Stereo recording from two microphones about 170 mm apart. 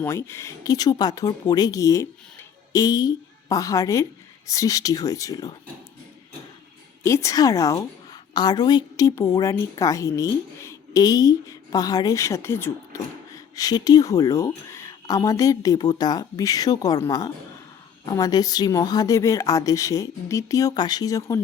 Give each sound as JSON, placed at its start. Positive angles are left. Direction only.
{"t": 0.0, "sound": "a woman's voice", "side_deg": 15}
{"t": 7.0, "sound": "a woman's voice", "side_deg": 15}